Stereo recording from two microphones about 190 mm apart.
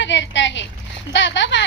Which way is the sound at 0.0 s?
70° left (ahead or behind).